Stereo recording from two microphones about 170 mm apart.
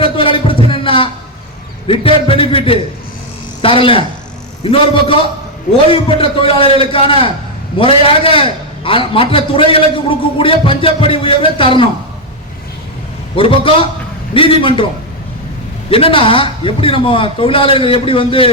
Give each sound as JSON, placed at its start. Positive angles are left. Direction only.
{"t": 0.0, "sound": "a sound", "side_deg": 30}
{"t": 1.9, "sound": "a man's voice", "side_deg": 30}
{"t": 13.3, "sound": "a man's voice", "side_deg": 30}
{"t": 15.9, "sound": "a man's voice", "side_deg": 35}